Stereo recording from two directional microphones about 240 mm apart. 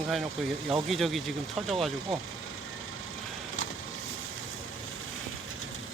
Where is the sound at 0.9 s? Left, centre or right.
Centre.